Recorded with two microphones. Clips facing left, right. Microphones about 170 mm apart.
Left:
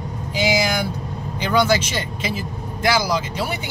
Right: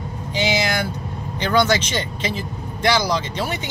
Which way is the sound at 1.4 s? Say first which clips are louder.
Even; 10° left (ahead or behind).